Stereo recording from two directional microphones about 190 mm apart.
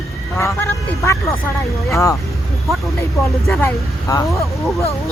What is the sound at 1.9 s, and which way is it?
Speech, 15° left (ahead or behind).